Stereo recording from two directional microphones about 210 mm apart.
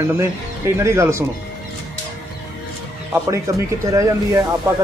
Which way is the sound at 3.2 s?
15° right (ahead or behind).